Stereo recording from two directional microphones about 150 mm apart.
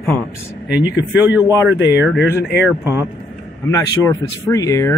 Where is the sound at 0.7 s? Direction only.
10° right (ahead or behind).